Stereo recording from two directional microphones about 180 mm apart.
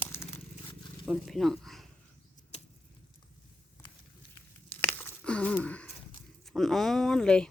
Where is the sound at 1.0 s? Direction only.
Centre (ahead or behind).